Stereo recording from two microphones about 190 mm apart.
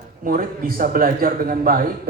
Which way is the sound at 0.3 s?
50° right (ahead or behind).